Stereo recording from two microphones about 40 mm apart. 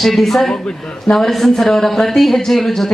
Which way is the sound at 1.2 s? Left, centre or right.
Centre.